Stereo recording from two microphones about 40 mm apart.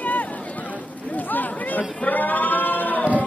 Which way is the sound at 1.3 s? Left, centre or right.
Left.